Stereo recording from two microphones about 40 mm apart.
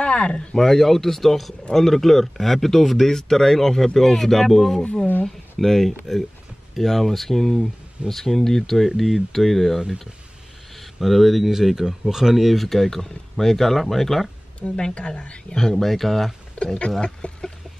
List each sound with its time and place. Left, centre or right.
0.0 s speech: left
0.6 s speech: centre
10.8 s speech: centre
14.6 s speech: centre
15.5 s speech: centre
16.5 s speech: left